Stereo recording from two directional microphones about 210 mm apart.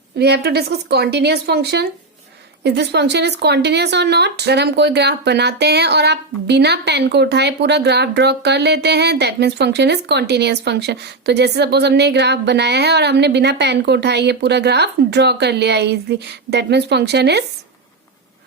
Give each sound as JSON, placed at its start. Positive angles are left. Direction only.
{"t": 0.2, "sound": "speech", "side_deg": -50}